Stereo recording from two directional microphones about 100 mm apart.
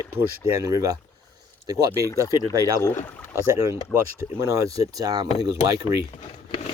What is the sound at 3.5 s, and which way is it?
Speech, 30° right (ahead or behind).